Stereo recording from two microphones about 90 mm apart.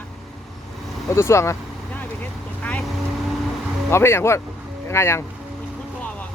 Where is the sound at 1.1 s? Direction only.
30° left (ahead or behind).